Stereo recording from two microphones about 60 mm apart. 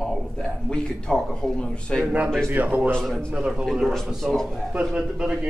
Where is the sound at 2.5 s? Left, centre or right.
Right.